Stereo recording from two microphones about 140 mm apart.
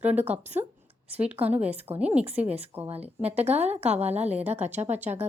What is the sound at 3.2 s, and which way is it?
A woman's voice, 50° right (ahead or behind).